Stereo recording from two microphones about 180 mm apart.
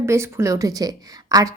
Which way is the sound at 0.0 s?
15° right (ahead or behind).